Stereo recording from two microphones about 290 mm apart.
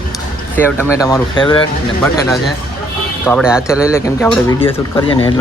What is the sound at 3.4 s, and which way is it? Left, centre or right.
Speech, centre.